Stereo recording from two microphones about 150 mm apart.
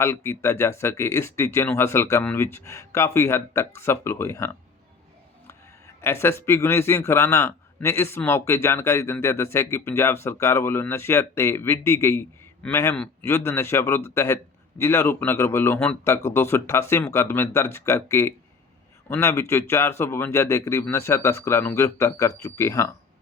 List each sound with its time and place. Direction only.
0.0 s a man's voice: 15° left (ahead or behind)
6.0 s a man's voice: 15° left (ahead or behind)